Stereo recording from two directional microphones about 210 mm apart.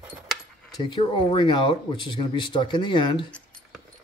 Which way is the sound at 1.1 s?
20° left (ahead or behind).